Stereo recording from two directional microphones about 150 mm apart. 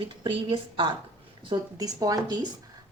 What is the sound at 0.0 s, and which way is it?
A woman's voice, 35° right (ahead or behind).